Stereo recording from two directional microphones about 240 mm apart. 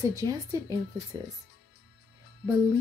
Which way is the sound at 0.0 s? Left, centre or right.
Centre.